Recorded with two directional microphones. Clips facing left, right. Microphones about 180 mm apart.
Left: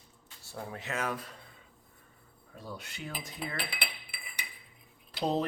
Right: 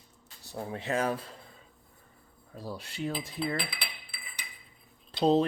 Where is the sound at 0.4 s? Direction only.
25° right (ahead or behind).